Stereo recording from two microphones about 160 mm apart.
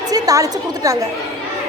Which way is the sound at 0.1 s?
20° right (ahead or behind).